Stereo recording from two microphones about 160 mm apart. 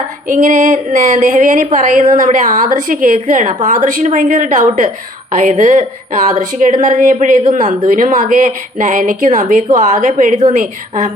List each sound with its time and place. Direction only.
0.3 s speech: 55° right (ahead or behind)